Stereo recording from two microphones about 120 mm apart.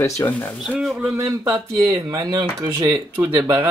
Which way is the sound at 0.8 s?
5° right (ahead or behind).